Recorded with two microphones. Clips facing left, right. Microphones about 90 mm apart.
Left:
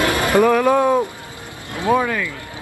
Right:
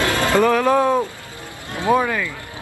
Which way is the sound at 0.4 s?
5° left (ahead or behind).